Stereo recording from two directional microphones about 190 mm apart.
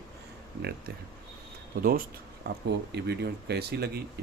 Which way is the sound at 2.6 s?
60° right (ahead or behind).